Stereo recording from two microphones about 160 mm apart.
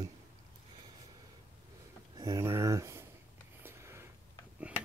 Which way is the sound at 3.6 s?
15° right (ahead or behind).